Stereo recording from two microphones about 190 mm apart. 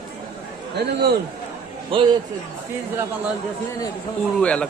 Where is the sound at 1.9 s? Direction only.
30° right (ahead or behind).